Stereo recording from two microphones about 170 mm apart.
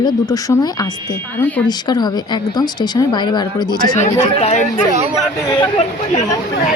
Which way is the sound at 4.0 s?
40° left (ahead or behind).